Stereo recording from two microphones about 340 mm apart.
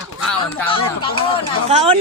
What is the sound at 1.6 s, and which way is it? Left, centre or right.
Speech, centre.